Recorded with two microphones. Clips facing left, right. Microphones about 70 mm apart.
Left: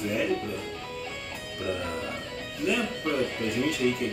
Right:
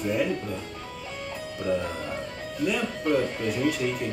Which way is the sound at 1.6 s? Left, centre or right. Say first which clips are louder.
Right 4 dB; right.